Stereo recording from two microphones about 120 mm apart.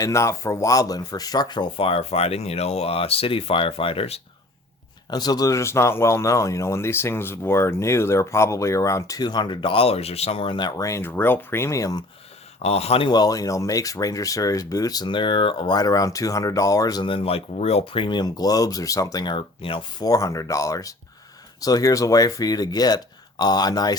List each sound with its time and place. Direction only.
0.0 s speech: 25° left (ahead or behind); by 4.2 s 55° left (ahead or behind)
5.1 s speech: 35° left (ahead or behind)
12.6 s speech: 60° left (ahead or behind)
13.1 s speech: 35° left (ahead or behind)
17.1 s speech: 50° left (ahead or behind)
20.0 s speech: 30° left (ahead or behind)